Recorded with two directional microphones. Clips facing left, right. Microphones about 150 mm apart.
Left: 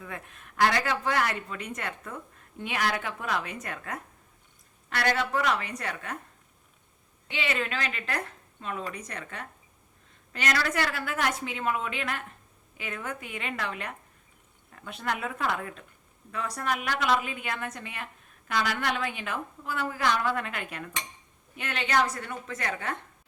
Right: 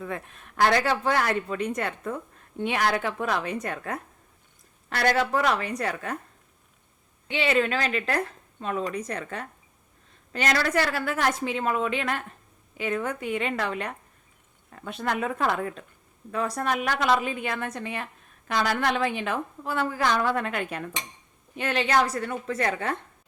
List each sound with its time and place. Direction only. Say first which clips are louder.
0.1 s a woman's voice: right 6 dB; 35° right (ahead or behind)
7.3 s a woman's voice: right 7 dB; 30° right (ahead or behind)